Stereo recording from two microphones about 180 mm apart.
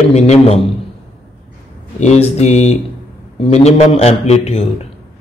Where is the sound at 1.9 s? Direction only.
40° left (ahead or behind).